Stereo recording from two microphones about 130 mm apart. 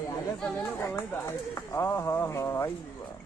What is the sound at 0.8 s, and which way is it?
A man's voice, 20° left (ahead or behind).